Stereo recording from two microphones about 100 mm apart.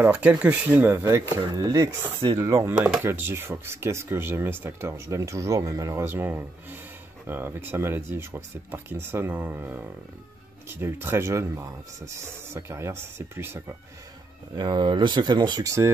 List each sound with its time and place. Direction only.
0.0 s speech: 15° right (ahead or behind)
14.5 s speech: 50° right (ahead or behind)